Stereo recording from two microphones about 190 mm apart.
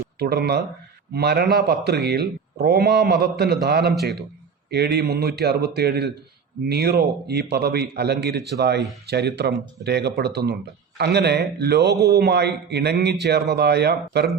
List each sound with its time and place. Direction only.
0.2 s speech: 60° right (ahead or behind)